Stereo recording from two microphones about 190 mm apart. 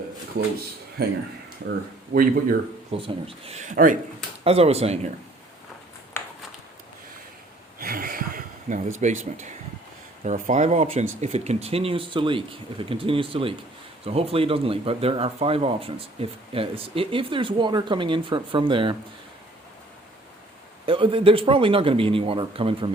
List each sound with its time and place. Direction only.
1.0 s speech: 55° right (ahead or behind)
2.9 s speech: 30° right (ahead or behind)
7.8 s a sound: 50° right (ahead or behind)
9.0 s speech: 40° right (ahead or behind)
10.2 s speech: 40° right (ahead or behind); by 18.9 s 25° right (ahead or behind)
20.8 s speech: 25° right (ahead or behind)